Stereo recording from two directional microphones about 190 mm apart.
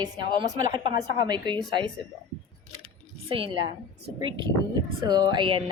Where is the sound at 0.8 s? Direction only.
25° right (ahead or behind).